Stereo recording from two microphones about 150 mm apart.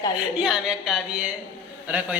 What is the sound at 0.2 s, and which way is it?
A woman's voice, 5° right (ahead or behind).